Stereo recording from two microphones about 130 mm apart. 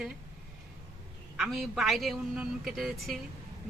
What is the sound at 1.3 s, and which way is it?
A man's voice, centre (ahead or behind).